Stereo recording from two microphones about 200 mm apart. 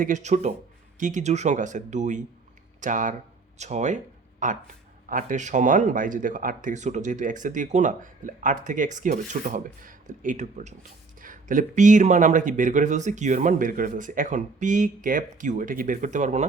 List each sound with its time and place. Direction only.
0.0 s speech: 35° right (ahead or behind)